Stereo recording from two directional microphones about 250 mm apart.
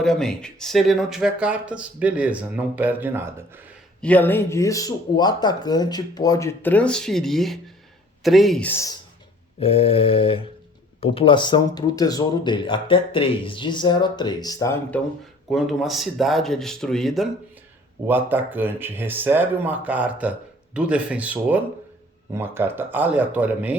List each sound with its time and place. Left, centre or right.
0.0 s speech: centre
4.0 s speech: centre
9.6 s mantra: left
11.0 s speech: left; by 23.7 s centre